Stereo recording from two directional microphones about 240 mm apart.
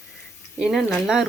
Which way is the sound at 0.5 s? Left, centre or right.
Centre.